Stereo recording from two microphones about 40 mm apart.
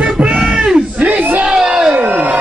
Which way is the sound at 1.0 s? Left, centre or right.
Right.